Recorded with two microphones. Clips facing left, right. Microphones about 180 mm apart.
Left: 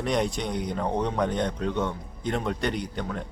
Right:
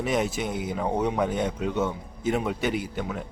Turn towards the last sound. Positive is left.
turn(degrees=-5)  # may be behind; listen again after turning